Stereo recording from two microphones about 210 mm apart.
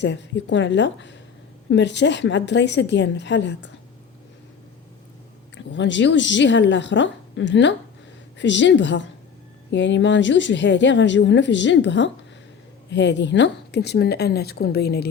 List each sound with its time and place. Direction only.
0.0 s a woman's voice: 60° left (ahead or behind)
5.5 s a woman's voice: 60° left (ahead or behind)